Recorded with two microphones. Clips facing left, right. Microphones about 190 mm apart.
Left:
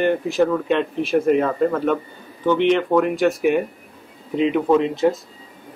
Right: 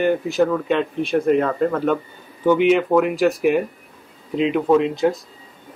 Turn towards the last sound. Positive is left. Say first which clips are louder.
# even
turn(degrees=0)  # may be behind; listen again after turning